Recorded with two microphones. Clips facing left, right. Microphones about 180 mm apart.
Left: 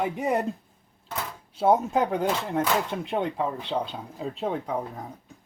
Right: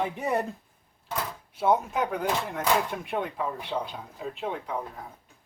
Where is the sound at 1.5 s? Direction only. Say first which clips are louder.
Left 3 dB; 30° left (ahead or behind).